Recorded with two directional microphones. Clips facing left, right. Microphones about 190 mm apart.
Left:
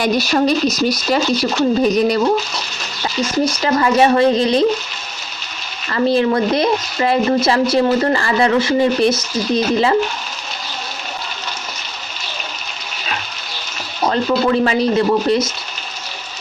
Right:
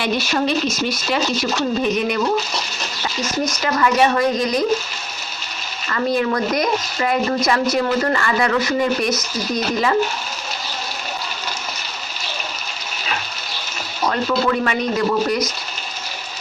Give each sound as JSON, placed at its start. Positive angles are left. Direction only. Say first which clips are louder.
{"t": 0.0, "sound": "speech", "louder": "left 5 dB", "side_deg": 40}
{"t": 3.4, "sound": "speech", "louder": "left 2 dB", "side_deg": 30}
{"t": 5.9, "sound": "speech", "louder": "left 5 dB", "side_deg": 30}
{"t": 14.0, "sound": "speech", "louder": "left 3 dB", "side_deg": 30}